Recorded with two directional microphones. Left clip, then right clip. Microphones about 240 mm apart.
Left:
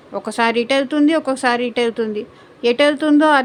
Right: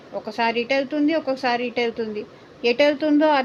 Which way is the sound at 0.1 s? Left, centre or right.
Left.